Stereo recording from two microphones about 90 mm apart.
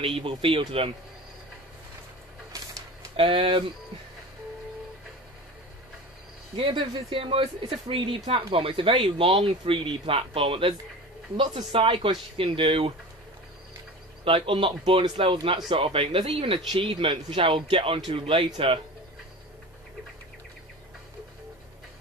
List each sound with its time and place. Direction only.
0.0 s speech: 75° right (ahead or behind)
3.2 s speech: 80° right
6.5 s speech: 65° right (ahead or behind); by 10.7 s 85° right
11.7 s speech: 85° right
14.2 s speech: 90° right